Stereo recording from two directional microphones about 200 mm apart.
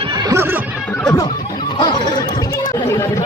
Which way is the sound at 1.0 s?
15° left (ahead or behind).